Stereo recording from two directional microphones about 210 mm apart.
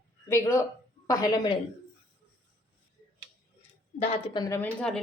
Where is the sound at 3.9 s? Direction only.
30° left (ahead or behind); by 5.0 s 5° left (ahead or behind).